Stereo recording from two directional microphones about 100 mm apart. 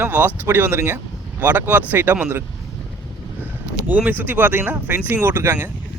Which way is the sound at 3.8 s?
15° right (ahead or behind).